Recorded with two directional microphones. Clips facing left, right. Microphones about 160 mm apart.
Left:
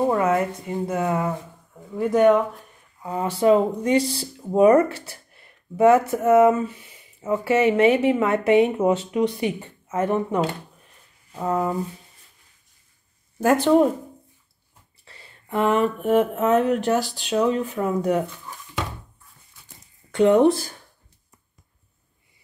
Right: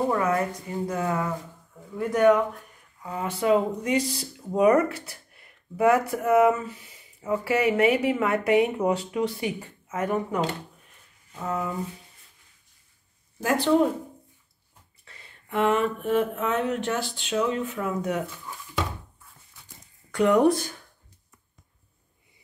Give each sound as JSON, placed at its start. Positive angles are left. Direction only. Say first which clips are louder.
{"t": 0.1, "sound": "speech", "louder": "left 4 dB", "side_deg": 20}
{"t": 3.0, "sound": "speech", "louder": "left 6 dB", "side_deg": 30}
{"t": 11.3, "sound": "a sound", "louder": "left 6 dB", "side_deg": 35}
{"t": 13.4, "sound": "speech", "louder": "left 6 dB", "side_deg": 50}
{"t": 15.0, "sound": "a sound", "louder": "left 5 dB", "side_deg": 35}
{"t": 20.1, "sound": "speech", "louder": "left 4 dB", "side_deg": 25}